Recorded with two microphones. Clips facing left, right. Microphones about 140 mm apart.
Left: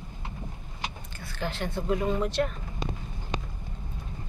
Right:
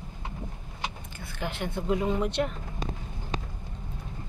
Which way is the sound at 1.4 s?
15° right (ahead or behind).